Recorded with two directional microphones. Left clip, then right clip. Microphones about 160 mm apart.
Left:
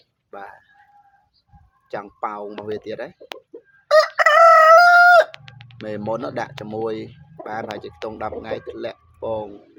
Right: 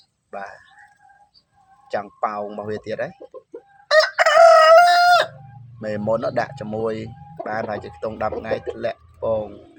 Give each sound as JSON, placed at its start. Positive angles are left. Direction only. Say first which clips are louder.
{"t": 0.3, "sound": "speech", "louder": "right 4 dB", "side_deg": 5}
{"t": 1.9, "sound": "speech", "louder": "right 4 dB", "side_deg": 5}
{"t": 3.8, "sound": "chicken", "louder": "left 1 dB", "side_deg": 20}
{"t": 4.5, "sound": "fowl", "louder": "left 1 dB", "side_deg": 20}
{"t": 5.8, "sound": "speech", "louder": "right 4 dB", "side_deg": 5}